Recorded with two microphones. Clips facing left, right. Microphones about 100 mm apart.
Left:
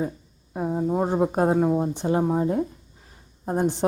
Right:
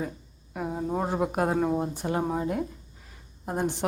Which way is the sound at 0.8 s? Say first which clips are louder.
Left 5 dB; 10° left (ahead or behind).